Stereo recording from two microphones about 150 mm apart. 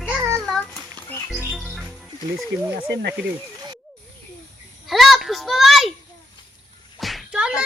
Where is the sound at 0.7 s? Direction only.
15° left (ahead or behind).